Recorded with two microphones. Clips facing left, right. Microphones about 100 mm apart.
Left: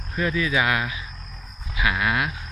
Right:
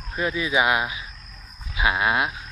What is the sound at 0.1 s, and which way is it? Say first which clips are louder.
Speech: even; 20° right (ahead or behind).